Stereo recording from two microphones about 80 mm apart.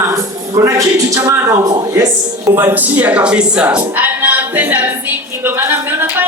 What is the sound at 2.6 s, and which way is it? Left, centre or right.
Speech, right.